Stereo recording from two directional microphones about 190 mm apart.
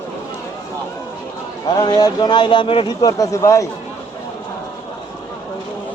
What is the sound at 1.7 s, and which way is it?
Speech, 20° left (ahead or behind).